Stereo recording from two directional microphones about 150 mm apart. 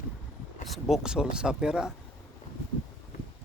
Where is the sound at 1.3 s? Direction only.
5° right (ahead or behind).